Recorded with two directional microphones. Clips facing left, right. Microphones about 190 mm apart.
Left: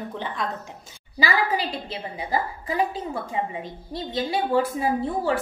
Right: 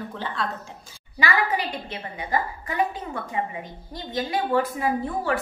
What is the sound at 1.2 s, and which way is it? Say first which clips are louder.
A woman's voice: left 1 dB; 30° left (ahead or behind).